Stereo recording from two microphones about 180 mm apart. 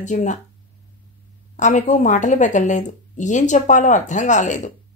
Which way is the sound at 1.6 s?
45° left (ahead or behind).